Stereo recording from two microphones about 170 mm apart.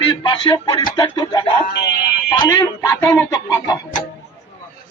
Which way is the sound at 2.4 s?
20° left (ahead or behind).